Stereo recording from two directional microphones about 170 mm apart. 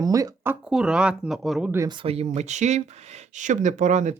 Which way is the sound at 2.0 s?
35° right (ahead or behind).